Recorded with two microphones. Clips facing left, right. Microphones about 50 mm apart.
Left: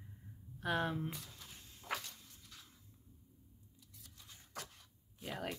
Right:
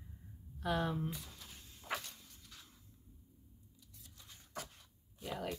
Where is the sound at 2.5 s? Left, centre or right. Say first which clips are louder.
Even; centre.